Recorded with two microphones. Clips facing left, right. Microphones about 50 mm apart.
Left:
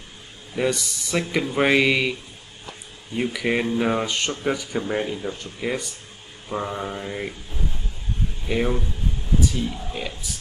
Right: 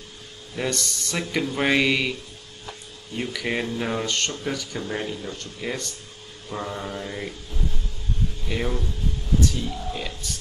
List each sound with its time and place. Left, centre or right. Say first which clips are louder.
0.6 s speech: left 4 dB; centre
3.2 s speech: left 4 dB; centre
8.5 s speech: left 5 dB; centre
9.4 s a sound: left 1 dB; centre